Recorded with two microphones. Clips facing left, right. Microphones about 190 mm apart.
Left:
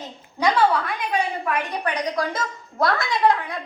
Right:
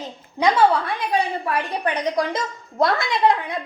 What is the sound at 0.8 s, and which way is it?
Speech, 35° right (ahead or behind).